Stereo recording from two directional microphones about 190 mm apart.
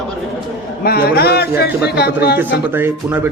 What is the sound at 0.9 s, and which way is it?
A man's voice, 55° left (ahead or behind).